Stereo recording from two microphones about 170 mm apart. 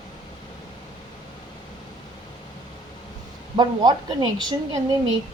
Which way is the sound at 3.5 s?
25° right (ahead or behind).